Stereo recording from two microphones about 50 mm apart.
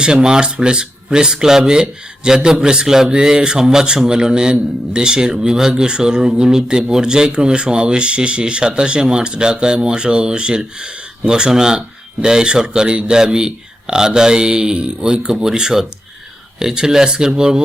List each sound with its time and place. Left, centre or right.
0.0 s speech: centre